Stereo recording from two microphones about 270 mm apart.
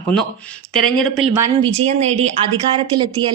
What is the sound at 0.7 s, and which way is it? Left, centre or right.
Speech, centre.